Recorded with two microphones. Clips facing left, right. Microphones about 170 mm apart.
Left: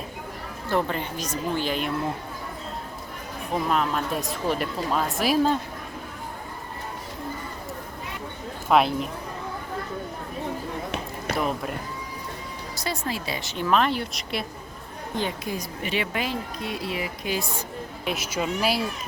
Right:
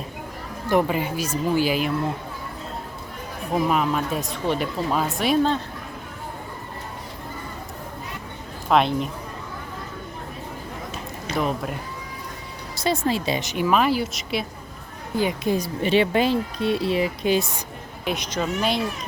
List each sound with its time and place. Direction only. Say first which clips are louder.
0.7 s a woman's voice: right 5 dB; 10° right (ahead or behind)
3.7 s speech: right 2 dB; 5° right (ahead or behind)
8.7 s speech: right 1 dB; 5° left (ahead or behind)
11.3 s speech: right 3 dB; centre (ahead or behind)
12.7 s a woman's voice: right 8 dB; 25° right (ahead or behind); by 15.4 s 10° right (ahead or behind)
15.4 s speech: right 8 dB; 30° right (ahead or behind)
18.0 s speech: right 2 dB; 5° left (ahead or behind)